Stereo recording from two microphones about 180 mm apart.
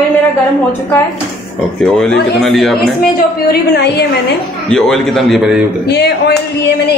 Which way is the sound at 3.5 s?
65° left (ahead or behind).